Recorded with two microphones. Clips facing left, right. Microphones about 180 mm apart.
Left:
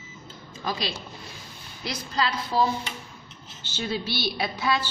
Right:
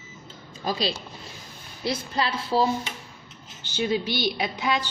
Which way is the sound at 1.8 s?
25° right (ahead or behind).